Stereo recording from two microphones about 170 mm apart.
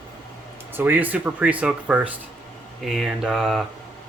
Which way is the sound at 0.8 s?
10° right (ahead or behind).